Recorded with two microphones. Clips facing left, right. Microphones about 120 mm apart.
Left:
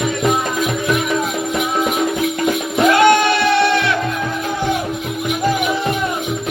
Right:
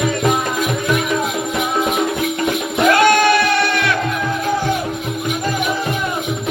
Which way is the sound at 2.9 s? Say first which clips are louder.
Even; 20° left (ahead or behind).